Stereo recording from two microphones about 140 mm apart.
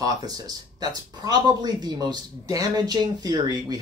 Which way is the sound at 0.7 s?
30° right (ahead or behind).